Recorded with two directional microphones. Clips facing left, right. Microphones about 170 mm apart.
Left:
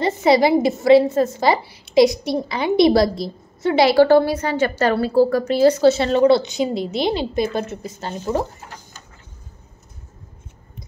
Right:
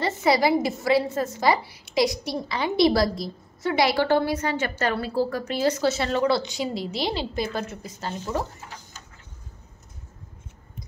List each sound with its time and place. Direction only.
0.0 s a woman's voice: 25° left (ahead or behind)